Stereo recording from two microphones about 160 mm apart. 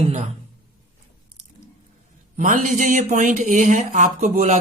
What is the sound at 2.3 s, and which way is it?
Speech, 50° right (ahead or behind).